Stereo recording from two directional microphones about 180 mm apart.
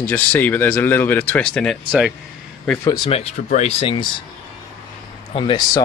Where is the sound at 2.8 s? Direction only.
20° left (ahead or behind).